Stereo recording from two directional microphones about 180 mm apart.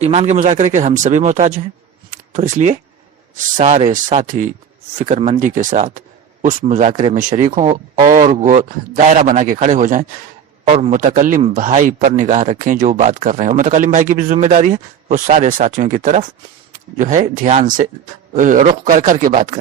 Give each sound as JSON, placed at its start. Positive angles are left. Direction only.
{"t": 0.0, "sound": "speech", "side_deg": -35}
{"t": 2.0, "sound": "a sound", "side_deg": -45}
{"t": 3.3, "sound": "speech", "side_deg": -40}